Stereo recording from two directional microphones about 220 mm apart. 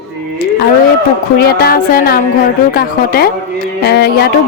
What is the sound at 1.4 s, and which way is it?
Speech, 45° left (ahead or behind).